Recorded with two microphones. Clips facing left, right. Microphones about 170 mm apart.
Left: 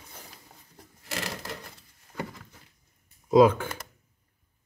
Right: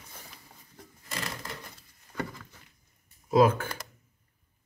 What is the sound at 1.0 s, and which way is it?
Crushing, 85° left.